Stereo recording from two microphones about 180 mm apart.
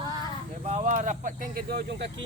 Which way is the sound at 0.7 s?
45° right (ahead or behind).